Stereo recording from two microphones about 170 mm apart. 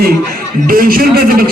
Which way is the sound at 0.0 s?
60° right (ahead or behind).